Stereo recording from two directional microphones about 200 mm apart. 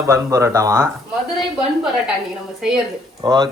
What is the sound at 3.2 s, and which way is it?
Speech, 20° right (ahead or behind).